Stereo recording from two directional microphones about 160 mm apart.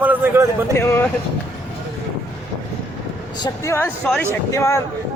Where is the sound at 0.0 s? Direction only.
10° right (ahead or behind).